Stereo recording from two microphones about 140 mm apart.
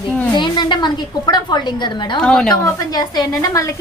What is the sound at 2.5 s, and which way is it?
A woman's voice, 25° left (ahead or behind).